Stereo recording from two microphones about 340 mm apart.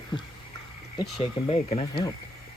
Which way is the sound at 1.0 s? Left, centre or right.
Centre.